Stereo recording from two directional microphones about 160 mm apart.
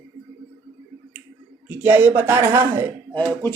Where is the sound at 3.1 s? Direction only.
10° left (ahead or behind).